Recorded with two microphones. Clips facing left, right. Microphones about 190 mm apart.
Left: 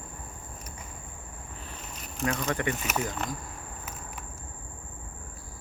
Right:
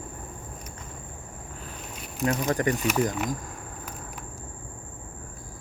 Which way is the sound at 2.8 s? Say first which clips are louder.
Right 7 dB; centre (ahead or behind).